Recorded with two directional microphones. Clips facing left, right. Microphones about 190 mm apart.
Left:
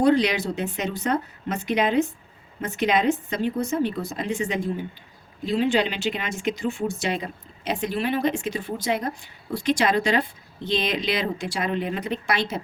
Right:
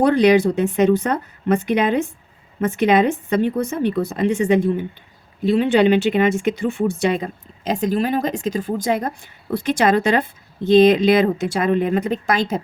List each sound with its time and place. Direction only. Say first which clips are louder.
0.0 s a woman's voice: right 6 dB; 55° right (ahead or behind)
7.7 s a woman's voice: right 6 dB; 40° right (ahead or behind)